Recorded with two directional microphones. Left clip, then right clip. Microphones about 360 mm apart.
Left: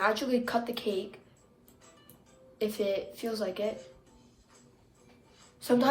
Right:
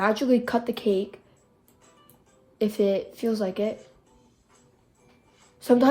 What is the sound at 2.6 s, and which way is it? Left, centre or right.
A woman's voice, right.